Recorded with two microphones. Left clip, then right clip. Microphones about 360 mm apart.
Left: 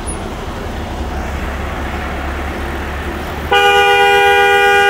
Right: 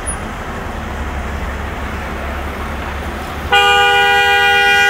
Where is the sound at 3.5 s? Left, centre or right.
Centre.